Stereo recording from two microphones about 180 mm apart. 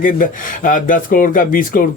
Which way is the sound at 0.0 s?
50° left (ahead or behind).